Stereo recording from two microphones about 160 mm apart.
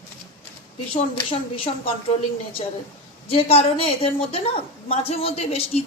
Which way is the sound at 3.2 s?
35° left (ahead or behind).